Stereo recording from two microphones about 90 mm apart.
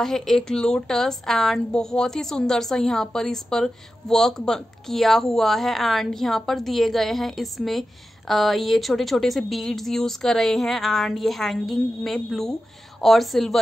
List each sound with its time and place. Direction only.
0.0 s a woman's voice: 5° left (ahead or behind)